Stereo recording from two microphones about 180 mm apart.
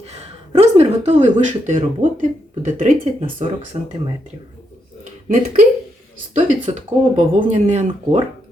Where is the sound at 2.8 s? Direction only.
40° right (ahead or behind).